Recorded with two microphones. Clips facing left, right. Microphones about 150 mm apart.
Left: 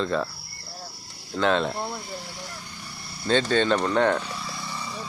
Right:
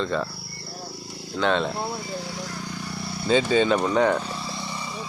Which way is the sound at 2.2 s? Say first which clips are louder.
Right 6 dB; 90° right.